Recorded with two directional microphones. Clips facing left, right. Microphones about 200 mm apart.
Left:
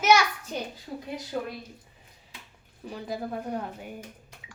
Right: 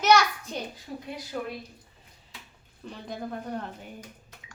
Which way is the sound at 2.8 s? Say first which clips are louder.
Left 3 dB; 5° left (ahead or behind).